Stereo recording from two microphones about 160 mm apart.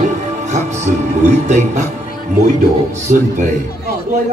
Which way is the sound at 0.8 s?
50° right (ahead or behind).